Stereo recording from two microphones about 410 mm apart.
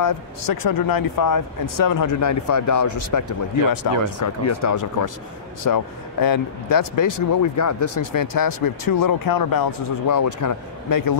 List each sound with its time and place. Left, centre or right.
0.0 s speech: left